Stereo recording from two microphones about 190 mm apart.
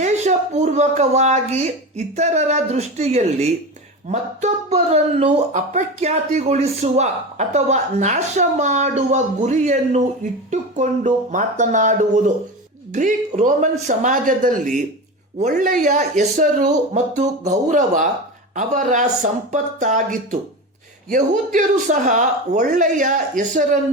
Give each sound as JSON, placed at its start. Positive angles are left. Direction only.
{"t": 0.0, "sound": "a man's voice", "side_deg": -35}